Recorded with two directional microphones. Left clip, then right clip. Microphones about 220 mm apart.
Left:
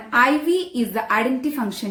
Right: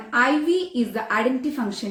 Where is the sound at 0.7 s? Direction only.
45° left (ahead or behind).